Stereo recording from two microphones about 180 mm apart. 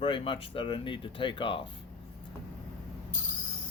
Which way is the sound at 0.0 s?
30° left (ahead or behind).